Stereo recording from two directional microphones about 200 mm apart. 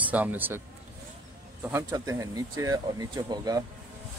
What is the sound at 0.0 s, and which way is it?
Speech, 10° right (ahead or behind).